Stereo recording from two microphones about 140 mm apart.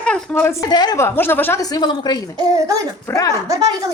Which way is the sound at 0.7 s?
30° left (ahead or behind).